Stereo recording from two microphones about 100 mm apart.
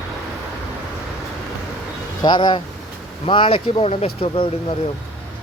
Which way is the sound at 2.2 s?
50° left (ahead or behind).